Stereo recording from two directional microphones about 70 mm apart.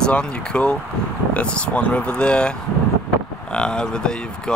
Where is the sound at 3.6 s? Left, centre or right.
Centre.